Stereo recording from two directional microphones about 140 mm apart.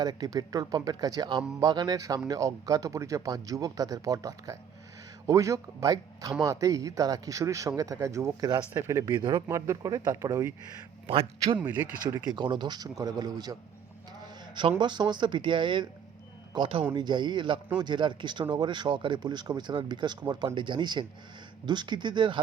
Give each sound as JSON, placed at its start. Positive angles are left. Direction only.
{"t": 0.0, "sound": "speech", "side_deg": -30}
{"t": 11.0, "sound": "a man's voice", "side_deg": -45}
{"t": 11.6, "sound": "speech", "side_deg": -10}
{"t": 12.2, "sound": "speech", "side_deg": -30}
{"t": 14.8, "sound": "speech", "side_deg": -35}